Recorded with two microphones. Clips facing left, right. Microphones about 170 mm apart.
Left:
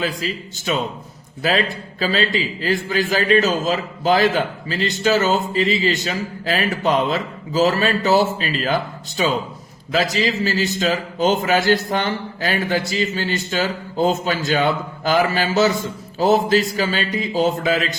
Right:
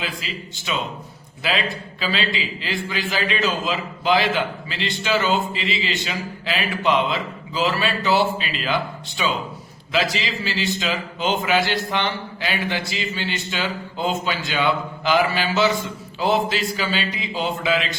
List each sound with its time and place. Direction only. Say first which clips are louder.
0.0 s a man's voice: left 6 dB; 45° left (ahead or behind)